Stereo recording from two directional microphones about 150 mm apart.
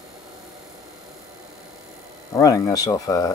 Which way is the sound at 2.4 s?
25° left (ahead or behind).